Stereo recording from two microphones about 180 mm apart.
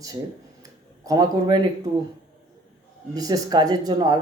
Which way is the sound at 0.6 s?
20° right (ahead or behind).